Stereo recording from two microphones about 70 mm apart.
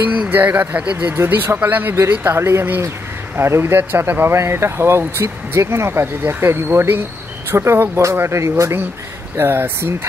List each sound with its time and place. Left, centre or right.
0.3 s speech: right
2.3 s speech: right